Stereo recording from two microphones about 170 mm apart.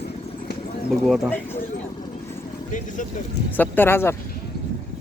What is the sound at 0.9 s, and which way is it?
Speech, 5° left (ahead or behind).